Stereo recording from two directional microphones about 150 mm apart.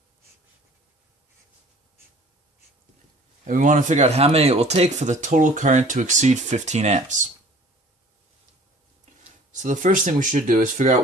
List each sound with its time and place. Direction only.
3.4 s speech: 60° right (ahead or behind)
9.5 s speech: 55° right (ahead or behind)